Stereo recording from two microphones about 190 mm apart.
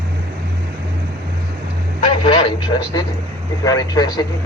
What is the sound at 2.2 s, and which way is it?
Radio, 25° left (ahead or behind).